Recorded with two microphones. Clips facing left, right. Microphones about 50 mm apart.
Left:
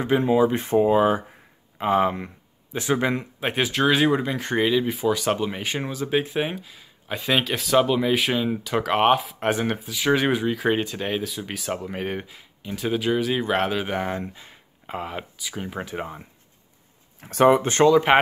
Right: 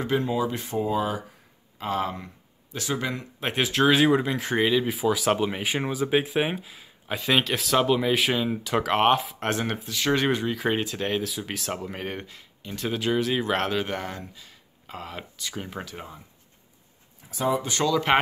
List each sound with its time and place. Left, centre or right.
0.0 s speech: left
3.3 s speech: centre
14.2 s speech: left
15.4 s speech: centre
15.8 s speech: left
17.2 s speech: left
17.6 s speech: left